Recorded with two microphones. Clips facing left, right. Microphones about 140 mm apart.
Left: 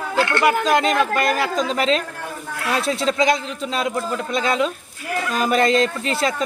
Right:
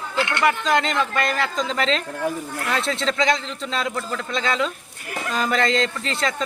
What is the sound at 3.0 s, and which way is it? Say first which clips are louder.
A man's voice: left 3 dB; 20° left (ahead or behind).